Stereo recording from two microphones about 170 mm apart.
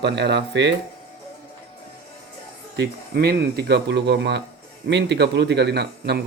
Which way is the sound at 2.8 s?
70° right (ahead or behind).